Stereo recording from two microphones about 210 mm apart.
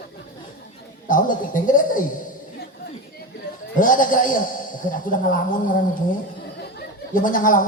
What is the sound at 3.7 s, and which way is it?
A man's voice, 40° left (ahead or behind).